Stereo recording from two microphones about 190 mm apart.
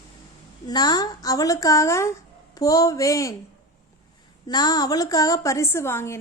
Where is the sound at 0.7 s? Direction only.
20° left (ahead or behind).